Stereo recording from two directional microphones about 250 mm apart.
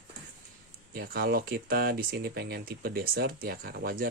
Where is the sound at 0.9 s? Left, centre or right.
Right.